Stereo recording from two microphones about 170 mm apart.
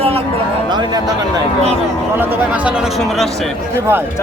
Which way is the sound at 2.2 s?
10° right (ahead or behind).